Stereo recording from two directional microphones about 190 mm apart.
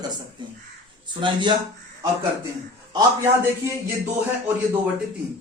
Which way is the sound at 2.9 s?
15° right (ahead or behind).